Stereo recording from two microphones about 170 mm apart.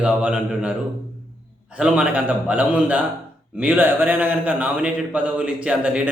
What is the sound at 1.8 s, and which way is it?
A man's voice, 5° right (ahead or behind).